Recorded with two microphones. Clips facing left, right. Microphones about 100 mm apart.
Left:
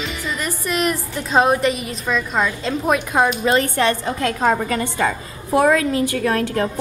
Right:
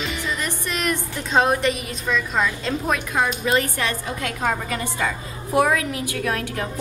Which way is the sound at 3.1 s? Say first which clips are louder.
Left 3 dB; 30° left (ahead or behind).